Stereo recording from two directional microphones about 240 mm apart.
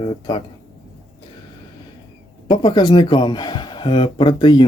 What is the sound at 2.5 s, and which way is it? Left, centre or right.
Speech, centre.